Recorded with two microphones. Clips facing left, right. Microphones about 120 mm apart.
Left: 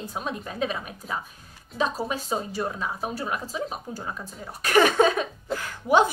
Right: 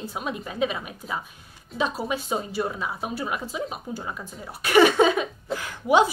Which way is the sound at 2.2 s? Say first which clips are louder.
Right 1 dB; 10° right (ahead or behind).